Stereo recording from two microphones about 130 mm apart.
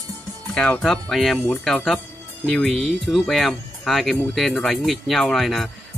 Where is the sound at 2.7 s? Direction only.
50° right (ahead or behind).